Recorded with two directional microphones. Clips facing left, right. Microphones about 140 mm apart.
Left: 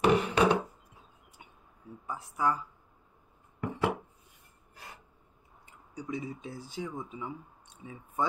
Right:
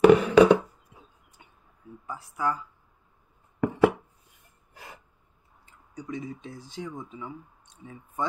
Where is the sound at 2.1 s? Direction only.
20° left (ahead or behind).